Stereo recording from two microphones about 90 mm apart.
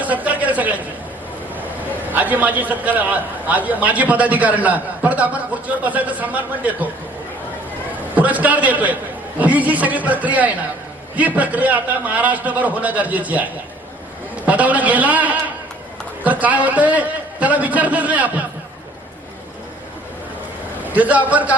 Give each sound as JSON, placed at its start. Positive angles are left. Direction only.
{"t": 0.0, "sound": "a sound", "side_deg": -15}
{"t": 2.0, "sound": "a man's voice", "side_deg": -20}
{"t": 8.1, "sound": "a man's voice", "side_deg": -15}
{"t": 20.8, "sound": "a man's voice", "side_deg": -15}